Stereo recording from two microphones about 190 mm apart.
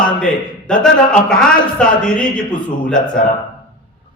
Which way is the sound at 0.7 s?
5° left (ahead or behind).